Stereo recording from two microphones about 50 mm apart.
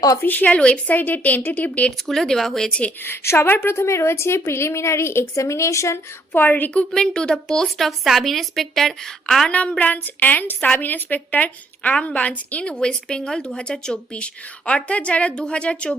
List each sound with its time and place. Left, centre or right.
0.2 s a woman's voice: left
0.5 s a woman's voice: left
0.9 s a woman's voice: left
2.0 s a woman's voice: centre
3.0 s a woman's voice: left
6.3 s a woman's voice: left
6.9 s a woman's voice: centre
7.9 s a woman's voice: centre
9.5 s a woman's voice: left